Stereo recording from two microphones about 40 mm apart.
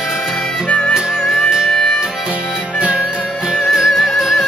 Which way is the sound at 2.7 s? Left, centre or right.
Right.